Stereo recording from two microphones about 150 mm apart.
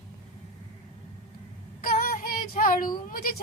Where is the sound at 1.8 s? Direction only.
80° left.